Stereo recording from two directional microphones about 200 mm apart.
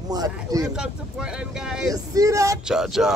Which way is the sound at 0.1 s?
20° right (ahead or behind).